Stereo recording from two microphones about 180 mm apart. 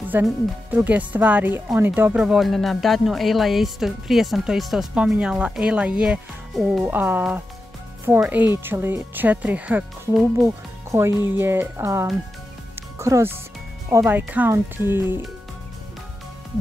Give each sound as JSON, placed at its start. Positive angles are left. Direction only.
{"t": 0.1, "sound": "speech", "side_deg": -10}